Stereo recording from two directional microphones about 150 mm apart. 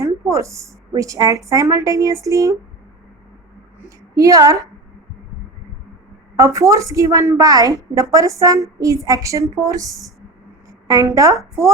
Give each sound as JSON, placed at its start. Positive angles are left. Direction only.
{"t": 0.0, "sound": "a woman's voice", "side_deg": -20}
{"t": 3.8, "sound": "a woman's voice", "side_deg": -20}
{"t": 6.3, "sound": "a woman's voice", "side_deg": -20}